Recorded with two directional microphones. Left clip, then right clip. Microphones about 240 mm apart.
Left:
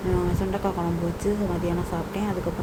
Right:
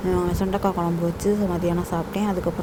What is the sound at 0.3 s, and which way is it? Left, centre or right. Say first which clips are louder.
Speech: right 3 dB; right.